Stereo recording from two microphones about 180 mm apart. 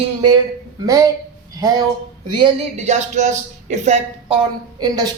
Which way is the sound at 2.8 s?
40° right (ahead or behind).